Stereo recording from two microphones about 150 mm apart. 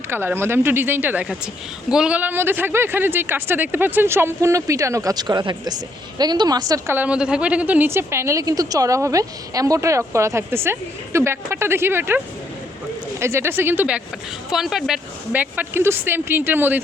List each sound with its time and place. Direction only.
0.1 s speech: 15° right (ahead or behind)